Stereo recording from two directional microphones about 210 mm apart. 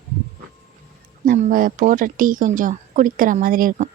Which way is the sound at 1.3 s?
40° right (ahead or behind).